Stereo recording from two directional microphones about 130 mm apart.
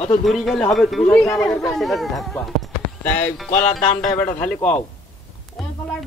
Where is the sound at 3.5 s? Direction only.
75° left (ahead or behind).